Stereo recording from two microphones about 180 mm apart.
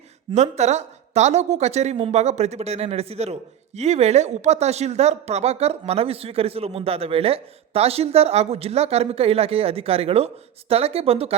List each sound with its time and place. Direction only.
0.3 s speech: 40° right (ahead or behind)